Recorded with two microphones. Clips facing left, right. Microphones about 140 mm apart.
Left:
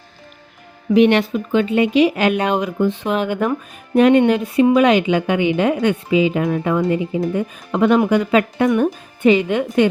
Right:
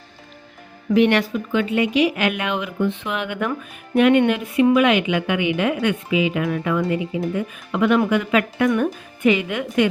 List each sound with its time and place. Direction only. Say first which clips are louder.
0.9 s speech: left 3 dB; 20° left (ahead or behind)